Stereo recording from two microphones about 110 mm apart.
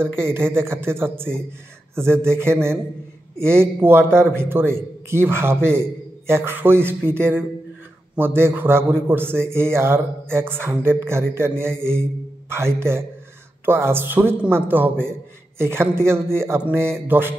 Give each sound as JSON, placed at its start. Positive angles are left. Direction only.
{"t": 0.0, "sound": "a man's voice", "side_deg": -20}